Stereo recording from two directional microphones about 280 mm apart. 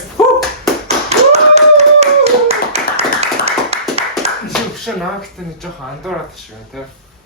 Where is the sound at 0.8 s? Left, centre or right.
Right.